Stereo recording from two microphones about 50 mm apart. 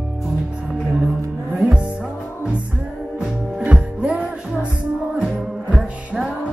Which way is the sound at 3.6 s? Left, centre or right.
Right.